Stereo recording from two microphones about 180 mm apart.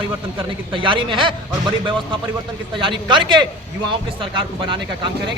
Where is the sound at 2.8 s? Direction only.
25° right (ahead or behind).